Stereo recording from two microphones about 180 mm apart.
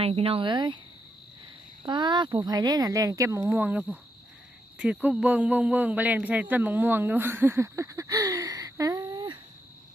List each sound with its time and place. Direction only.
0.0 s speech: 35° right (ahead or behind)
1.8 s speech: 25° right (ahead or behind)